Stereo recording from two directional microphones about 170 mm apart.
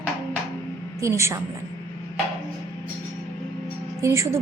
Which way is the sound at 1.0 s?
15° right (ahead or behind).